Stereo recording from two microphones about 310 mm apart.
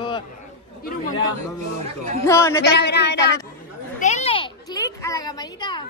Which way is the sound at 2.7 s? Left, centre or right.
Left.